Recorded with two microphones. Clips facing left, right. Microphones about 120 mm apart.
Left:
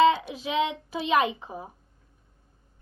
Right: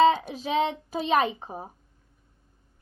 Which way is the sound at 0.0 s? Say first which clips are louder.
Even; 40° right (ahead or behind).